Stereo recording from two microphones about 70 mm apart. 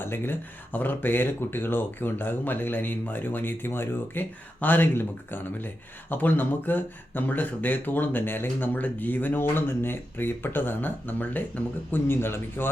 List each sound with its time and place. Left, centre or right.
0.0 s speech: left